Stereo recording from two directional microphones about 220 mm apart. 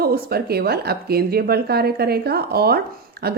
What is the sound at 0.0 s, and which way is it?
A woman's voice, 45° right (ahead or behind).